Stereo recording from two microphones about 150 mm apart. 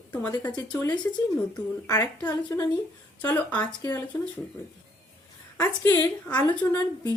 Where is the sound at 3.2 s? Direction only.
10° left (ahead or behind).